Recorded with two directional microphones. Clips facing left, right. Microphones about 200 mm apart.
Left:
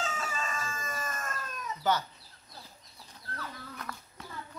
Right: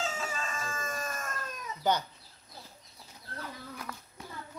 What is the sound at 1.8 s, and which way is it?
Speech, 15° right (ahead or behind).